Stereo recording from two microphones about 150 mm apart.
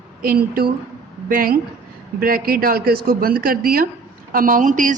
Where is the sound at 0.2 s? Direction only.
75° right (ahead or behind).